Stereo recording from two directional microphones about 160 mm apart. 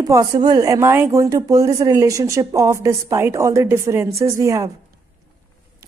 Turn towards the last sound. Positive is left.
turn(degrees=-20)  # may be behind; listen again after turning